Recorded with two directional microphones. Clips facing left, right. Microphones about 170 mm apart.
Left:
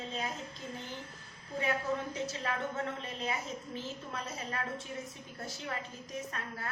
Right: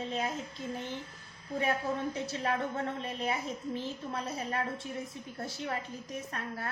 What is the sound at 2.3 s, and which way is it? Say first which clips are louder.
Speech: right 3 dB; 35° right (ahead or behind).